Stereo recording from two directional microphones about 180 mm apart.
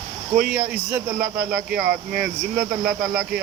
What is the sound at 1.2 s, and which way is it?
Speech, 60° right (ahead or behind).